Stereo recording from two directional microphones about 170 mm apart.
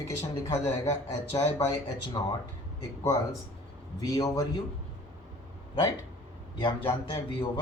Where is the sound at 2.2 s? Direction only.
25° left (ahead or behind).